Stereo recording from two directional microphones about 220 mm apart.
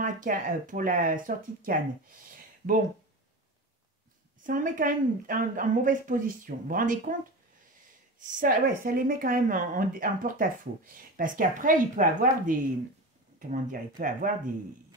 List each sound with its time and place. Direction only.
0.0 s speech: 35° right (ahead or behind)
4.4 s speech: 35° right (ahead or behind)
8.2 s speech: 35° right (ahead or behind)